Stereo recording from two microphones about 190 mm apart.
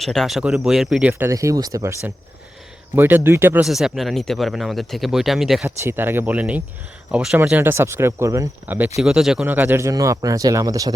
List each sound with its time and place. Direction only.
0.0 s speech: centre (ahead or behind)
5.6 s speech: 10° right (ahead or behind)